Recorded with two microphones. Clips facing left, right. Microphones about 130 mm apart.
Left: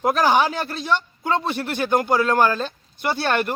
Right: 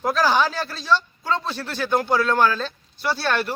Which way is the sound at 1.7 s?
55° left (ahead or behind).